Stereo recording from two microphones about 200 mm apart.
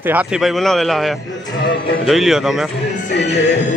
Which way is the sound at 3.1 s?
55° left (ahead or behind).